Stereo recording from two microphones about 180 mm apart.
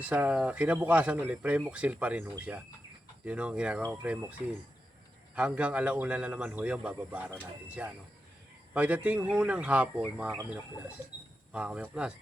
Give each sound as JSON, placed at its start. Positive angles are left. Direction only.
{"t": 0.0, "sound": "speech", "side_deg": -10}